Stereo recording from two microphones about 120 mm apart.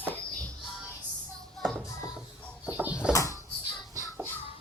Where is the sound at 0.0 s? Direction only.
15° left (ahead or behind).